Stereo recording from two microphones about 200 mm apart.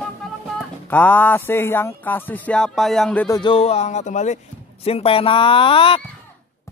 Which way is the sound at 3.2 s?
20° left (ahead or behind).